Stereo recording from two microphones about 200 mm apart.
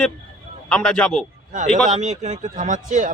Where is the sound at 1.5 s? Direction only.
40° right (ahead or behind).